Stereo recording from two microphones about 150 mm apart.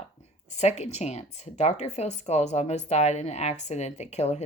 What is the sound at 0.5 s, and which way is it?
Speech, 50° left (ahead or behind).